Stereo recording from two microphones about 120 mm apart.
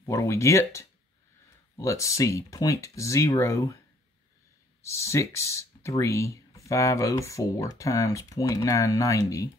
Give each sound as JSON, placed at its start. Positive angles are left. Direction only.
{"t": 0.0, "sound": "speech", "side_deg": 25}
{"t": 4.8, "sound": "speech", "side_deg": 25}